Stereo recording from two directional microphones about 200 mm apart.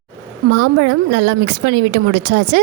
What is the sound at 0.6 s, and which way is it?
A woman's voice, 75° right (ahead or behind).